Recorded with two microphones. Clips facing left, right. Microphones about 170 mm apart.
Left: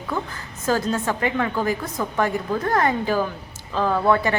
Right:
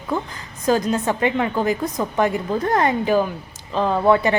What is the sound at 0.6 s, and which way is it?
A woman's voice, 15° right (ahead or behind).